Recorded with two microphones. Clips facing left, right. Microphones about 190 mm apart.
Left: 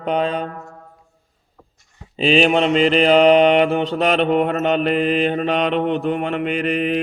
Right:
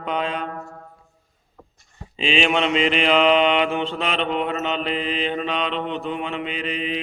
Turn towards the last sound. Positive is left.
turn(degrees=55)  # may be behind; listen again after turning